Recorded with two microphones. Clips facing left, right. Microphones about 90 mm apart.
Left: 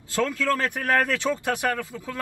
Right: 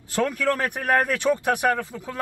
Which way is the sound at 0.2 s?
20° right (ahead or behind).